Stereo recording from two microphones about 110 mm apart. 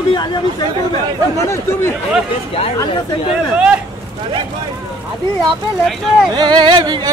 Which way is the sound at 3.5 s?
10° right (ahead or behind).